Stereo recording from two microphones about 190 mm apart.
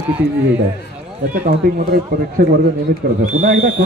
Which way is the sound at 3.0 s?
50° right (ahead or behind).